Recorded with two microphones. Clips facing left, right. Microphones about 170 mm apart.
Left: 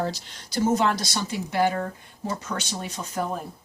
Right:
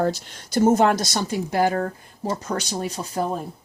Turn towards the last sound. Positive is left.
turn(degrees=-35)  # may be behind; listen again after turning